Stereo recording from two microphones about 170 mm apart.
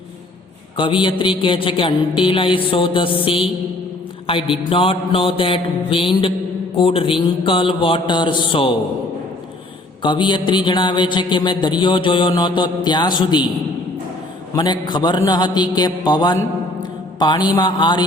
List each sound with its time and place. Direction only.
0.8 s mantra: 30° left (ahead or behind)
10.0 s a man's voice: 30° left (ahead or behind)
14.5 s a man's voice: 25° left (ahead or behind)
16.8 s mantra: 25° left (ahead or behind)
17.6 s a man's voice: 25° left (ahead or behind)